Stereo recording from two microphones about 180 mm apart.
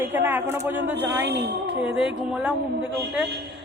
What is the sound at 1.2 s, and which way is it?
Speech, 70° right (ahead or behind).